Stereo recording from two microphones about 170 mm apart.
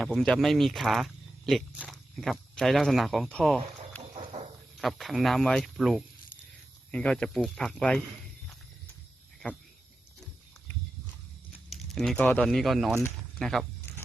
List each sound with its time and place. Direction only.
0.0 s speech: centre (ahead or behind)
4.3 s a sound: 40° right (ahead or behind)
4.8 s speech: centre (ahead or behind)
9.4 s speech: 5° left (ahead or behind)
11.7 s speech: centre (ahead or behind)